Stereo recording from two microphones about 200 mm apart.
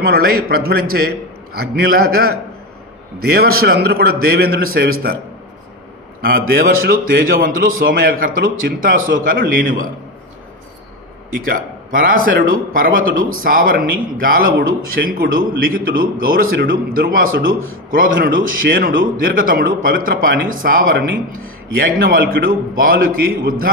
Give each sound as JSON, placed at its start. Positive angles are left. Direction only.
{"t": 0.0, "sound": "a man's voice", "side_deg": -50}
{"t": 6.2, "sound": "a man's voice", "side_deg": -45}
{"t": 11.3, "sound": "a man's voice", "side_deg": -45}